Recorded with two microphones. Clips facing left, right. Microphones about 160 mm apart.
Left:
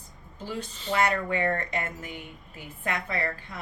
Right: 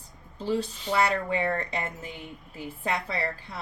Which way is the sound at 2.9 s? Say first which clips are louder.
Even; 30° right (ahead or behind).